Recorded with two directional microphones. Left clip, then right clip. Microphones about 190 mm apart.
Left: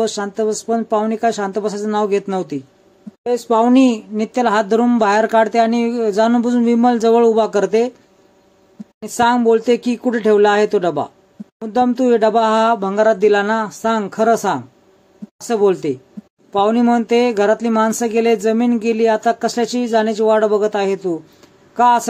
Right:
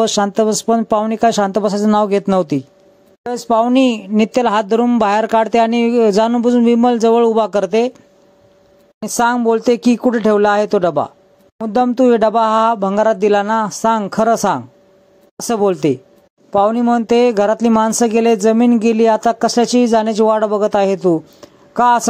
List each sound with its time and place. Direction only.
0.0 s speech: 50° right (ahead or behind)
9.0 s speech: 40° right (ahead or behind)